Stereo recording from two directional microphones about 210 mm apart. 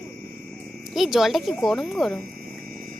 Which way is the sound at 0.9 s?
Centre (ahead or behind).